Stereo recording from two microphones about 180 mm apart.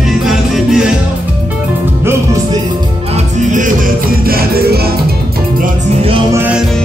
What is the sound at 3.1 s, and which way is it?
Music, 45° right (ahead or behind).